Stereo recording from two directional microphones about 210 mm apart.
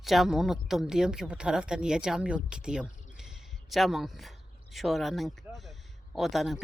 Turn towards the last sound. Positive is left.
turn(degrees=0)  # may be behind; listen again after turning